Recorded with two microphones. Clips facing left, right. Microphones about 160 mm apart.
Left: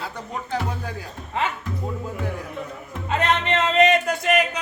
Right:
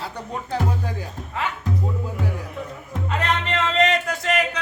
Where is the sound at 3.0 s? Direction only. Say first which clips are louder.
Left 3 dB; 20° left (ahead or behind).